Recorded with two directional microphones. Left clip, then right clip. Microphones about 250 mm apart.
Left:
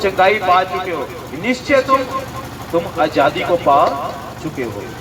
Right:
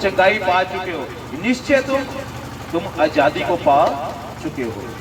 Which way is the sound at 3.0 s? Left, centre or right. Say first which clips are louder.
Even; left.